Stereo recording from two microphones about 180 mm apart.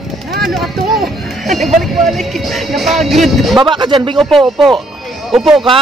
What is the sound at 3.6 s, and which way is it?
Speech, 25° right (ahead or behind).